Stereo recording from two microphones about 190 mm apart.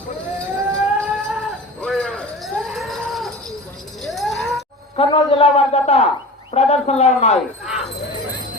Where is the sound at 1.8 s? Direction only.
5° left (ahead or behind).